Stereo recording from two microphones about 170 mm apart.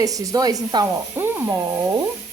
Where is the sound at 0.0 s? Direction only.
20° right (ahead or behind).